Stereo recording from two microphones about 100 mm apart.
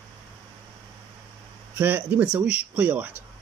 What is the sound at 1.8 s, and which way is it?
Speech, 20° right (ahead or behind).